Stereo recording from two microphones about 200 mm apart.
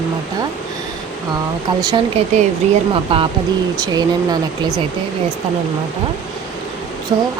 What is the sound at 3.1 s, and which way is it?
Speech, 25° right (ahead or behind).